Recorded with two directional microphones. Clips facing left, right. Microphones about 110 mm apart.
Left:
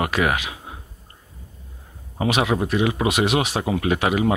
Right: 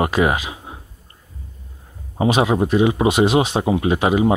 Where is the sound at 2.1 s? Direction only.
25° right (ahead or behind).